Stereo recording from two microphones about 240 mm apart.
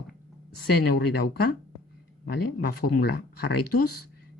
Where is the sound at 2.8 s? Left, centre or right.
Left.